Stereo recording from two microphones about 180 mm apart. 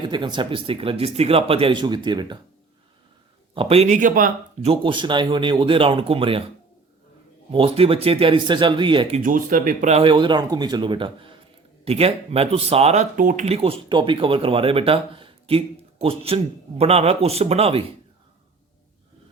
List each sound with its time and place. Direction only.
0.0 s speech: 25° right (ahead or behind)
3.5 s speech: 30° right (ahead or behind); by 4.3 s 50° right (ahead or behind)
4.6 s speech: 30° right (ahead or behind)
7.5 s speech: 30° right (ahead or behind)
9.2 s speech: 50° right (ahead or behind)
9.9 s speech: 30° right (ahead or behind)